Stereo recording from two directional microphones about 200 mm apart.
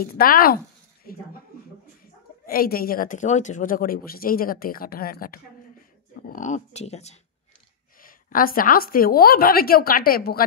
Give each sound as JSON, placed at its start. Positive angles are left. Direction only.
{"t": 0.0, "sound": "speech", "side_deg": 45}
{"t": 2.4, "sound": "speech", "side_deg": 45}
{"t": 8.0, "sound": "speech", "side_deg": 45}